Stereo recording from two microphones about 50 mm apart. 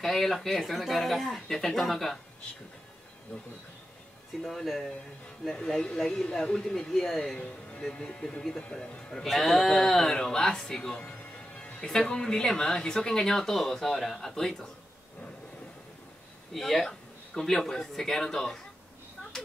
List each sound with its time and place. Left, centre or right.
0.0 s speech: centre
4.4 s speech: centre
5.5 s speech: centre
7.3 s speech: left
9.3 s speech: centre; by 11.9 s left
11.9 s speech: centre
16.5 s speech: centre